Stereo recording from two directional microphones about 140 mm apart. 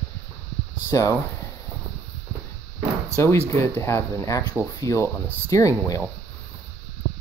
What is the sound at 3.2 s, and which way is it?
Speech, 20° left (ahead or behind).